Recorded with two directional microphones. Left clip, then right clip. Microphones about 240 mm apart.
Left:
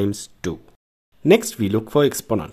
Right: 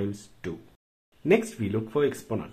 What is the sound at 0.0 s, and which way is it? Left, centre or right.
Speech, left.